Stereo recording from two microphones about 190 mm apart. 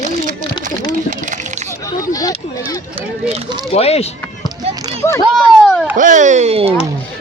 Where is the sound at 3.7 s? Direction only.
35° left (ahead or behind).